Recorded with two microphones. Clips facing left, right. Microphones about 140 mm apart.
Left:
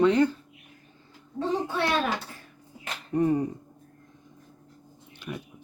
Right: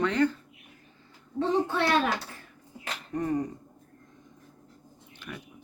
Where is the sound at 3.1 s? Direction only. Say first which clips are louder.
Left 5 dB; 10° left (ahead or behind).